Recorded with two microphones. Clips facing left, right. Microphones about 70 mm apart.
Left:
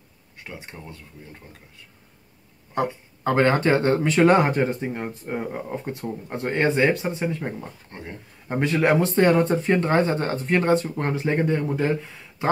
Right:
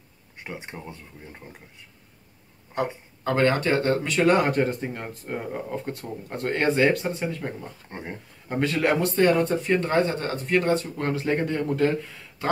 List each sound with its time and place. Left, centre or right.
0.4 s speech: right
3.3 s speech: left
7.9 s speech: right
8.5 s speech: left